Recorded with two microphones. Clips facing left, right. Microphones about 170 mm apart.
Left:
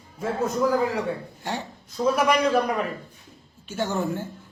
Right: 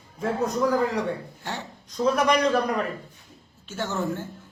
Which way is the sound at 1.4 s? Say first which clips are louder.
Left 3 dB; 10° left (ahead or behind).